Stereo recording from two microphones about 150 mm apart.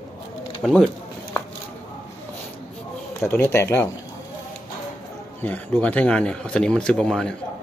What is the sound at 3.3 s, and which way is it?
Speech, 15° left (ahead or behind).